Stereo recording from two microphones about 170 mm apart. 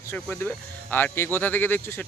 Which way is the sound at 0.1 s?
5° left (ahead or behind).